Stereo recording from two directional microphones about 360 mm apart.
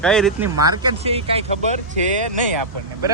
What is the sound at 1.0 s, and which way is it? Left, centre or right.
Speech, centre.